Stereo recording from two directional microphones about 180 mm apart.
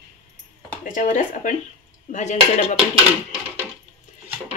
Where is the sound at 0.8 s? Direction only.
50° left (ahead or behind).